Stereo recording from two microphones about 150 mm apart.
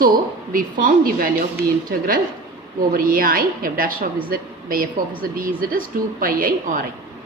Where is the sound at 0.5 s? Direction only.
70° right (ahead or behind).